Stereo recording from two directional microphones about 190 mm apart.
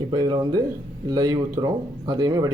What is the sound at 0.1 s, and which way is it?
Speech, 25° right (ahead or behind).